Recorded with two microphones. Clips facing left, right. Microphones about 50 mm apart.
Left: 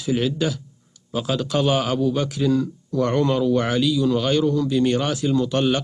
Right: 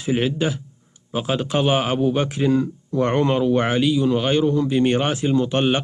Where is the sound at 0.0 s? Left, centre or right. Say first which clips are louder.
Right 1 dB; right.